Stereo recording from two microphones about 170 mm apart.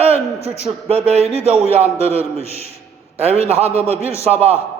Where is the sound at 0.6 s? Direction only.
35° right (ahead or behind).